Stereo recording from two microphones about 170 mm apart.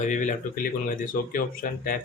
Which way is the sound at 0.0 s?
45° left (ahead or behind).